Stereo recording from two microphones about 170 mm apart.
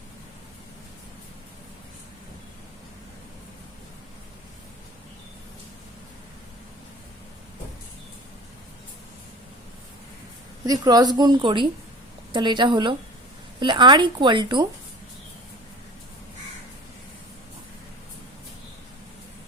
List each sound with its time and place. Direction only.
10.7 s a woman's voice: 25° right (ahead or behind)